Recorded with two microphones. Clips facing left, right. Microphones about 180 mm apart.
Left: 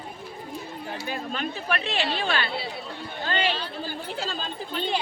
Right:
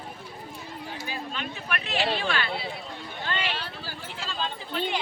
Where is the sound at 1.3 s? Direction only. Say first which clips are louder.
Left 5 dB; 35° left (ahead or behind).